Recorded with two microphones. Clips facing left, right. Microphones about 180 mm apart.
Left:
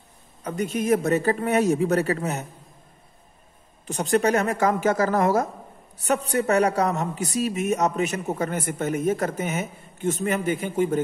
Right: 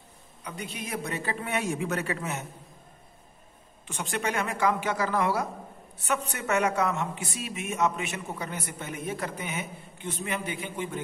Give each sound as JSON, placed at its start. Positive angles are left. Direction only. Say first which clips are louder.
{"t": 0.4, "sound": "speech", "louder": "left 12 dB", "side_deg": 45}
{"t": 3.8, "sound": "a woman's voice", "louder": "left 10 dB", "side_deg": 40}